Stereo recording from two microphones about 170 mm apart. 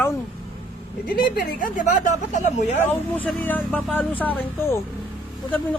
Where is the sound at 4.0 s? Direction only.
10° left (ahead or behind).